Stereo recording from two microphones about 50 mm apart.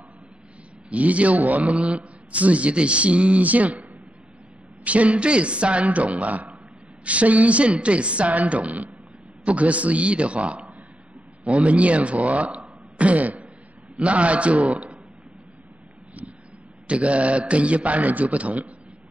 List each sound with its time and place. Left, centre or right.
0.8 s a man's voice: right
4.8 s a man's voice: right
16.8 s a man's voice: right